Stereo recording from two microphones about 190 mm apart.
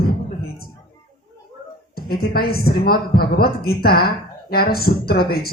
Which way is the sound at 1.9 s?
55° left (ahead or behind).